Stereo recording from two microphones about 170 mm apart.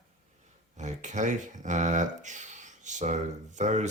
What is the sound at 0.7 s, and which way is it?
Speech, 45° right (ahead or behind).